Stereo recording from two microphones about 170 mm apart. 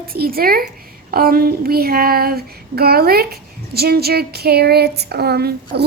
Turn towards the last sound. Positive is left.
turn(degrees=-70)  # may be behind; listen again after turning